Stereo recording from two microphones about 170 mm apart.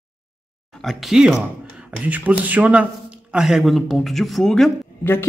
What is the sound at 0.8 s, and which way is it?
A man's voice, centre (ahead or behind).